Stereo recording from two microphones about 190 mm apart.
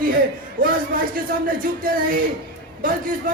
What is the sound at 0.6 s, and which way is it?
A man's voice, 45° right (ahead or behind).